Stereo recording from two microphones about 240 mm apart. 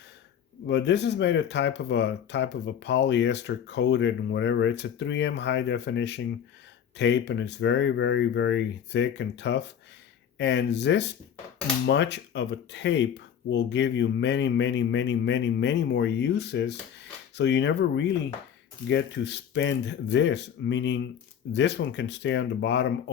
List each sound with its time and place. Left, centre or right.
0.7 s speech: left